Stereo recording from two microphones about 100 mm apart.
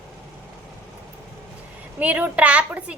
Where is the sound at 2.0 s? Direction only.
15° right (ahead or behind).